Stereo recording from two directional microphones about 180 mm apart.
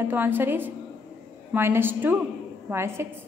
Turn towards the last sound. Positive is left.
turn(degrees=-15)  # may be behind; listen again after turning